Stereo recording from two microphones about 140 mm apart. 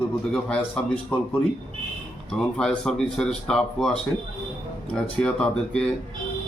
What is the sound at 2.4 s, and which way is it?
A man's voice, 5° left (ahead or behind).